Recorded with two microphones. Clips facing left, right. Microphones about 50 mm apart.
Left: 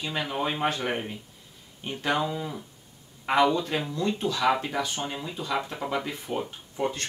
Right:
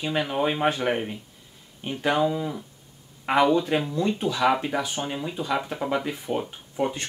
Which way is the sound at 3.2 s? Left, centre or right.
Centre.